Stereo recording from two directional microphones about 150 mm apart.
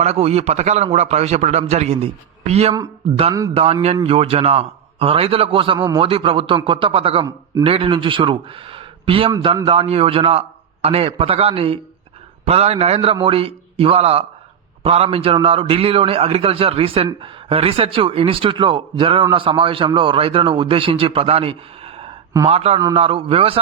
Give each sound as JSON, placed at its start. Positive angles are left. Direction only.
{"t": 0.0, "sound": "a man's voice", "side_deg": -45}